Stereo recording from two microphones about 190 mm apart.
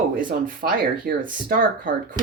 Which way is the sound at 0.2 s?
50° right (ahead or behind).